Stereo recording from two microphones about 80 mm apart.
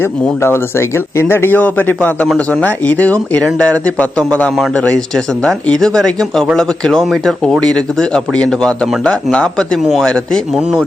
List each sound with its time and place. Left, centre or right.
0.4 s a man's voice: left; by 10.4 s centre
10.5 s speech: centre